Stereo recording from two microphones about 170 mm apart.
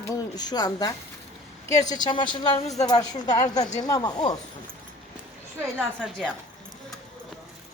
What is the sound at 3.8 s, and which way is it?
Speech, 25° left (ahead or behind).